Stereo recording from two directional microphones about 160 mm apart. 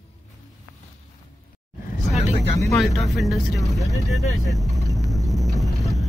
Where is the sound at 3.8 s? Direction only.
20° left (ahead or behind).